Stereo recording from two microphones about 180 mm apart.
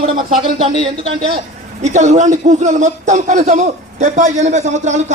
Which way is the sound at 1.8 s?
40° right (ahead or behind).